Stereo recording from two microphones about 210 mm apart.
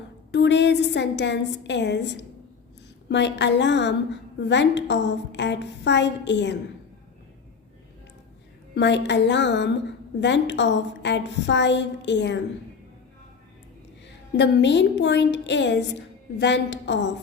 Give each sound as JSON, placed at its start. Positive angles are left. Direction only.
{"t": 0.3, "sound": "a woman's voice", "side_deg": 55}
{"t": 8.7, "sound": "a woman's voice", "side_deg": 55}
{"t": 14.3, "sound": "a woman's voice", "side_deg": 55}